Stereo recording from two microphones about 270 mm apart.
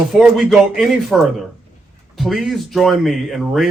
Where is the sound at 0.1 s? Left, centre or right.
Centre.